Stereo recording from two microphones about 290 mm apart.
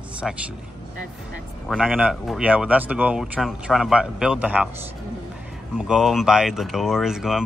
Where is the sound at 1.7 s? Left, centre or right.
Centre.